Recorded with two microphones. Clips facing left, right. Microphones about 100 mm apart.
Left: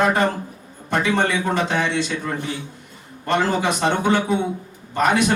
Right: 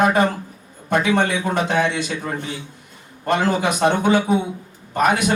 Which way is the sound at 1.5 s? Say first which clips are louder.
Right 2 dB; 55° right (ahead or behind).